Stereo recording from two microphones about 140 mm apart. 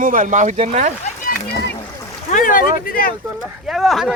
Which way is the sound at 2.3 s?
75° left (ahead or behind).